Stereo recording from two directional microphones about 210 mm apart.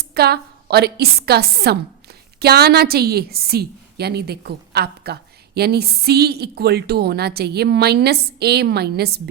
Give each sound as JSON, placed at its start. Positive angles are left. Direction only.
{"t": 0.0, "sound": "a woman's voice", "side_deg": -50}